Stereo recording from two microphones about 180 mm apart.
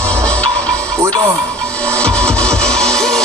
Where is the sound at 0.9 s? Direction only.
15° right (ahead or behind).